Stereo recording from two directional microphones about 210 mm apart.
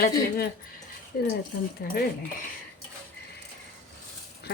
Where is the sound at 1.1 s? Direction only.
45° left (ahead or behind).